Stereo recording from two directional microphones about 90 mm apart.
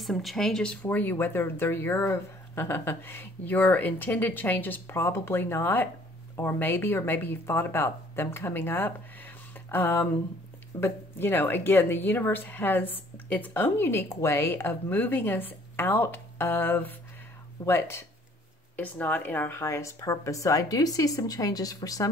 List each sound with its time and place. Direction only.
0.0 s speech: centre (ahead or behind)
0.8 s a woman's voice: 25° left (ahead or behind)
18.8 s a woman's voice: 15° left (ahead or behind); by 22.1 s 40° left (ahead or behind)